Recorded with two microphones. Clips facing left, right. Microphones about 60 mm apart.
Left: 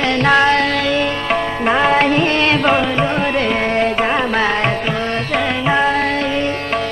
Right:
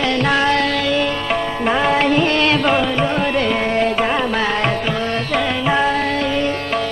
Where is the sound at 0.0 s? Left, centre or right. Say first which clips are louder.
Left 3 dB; left.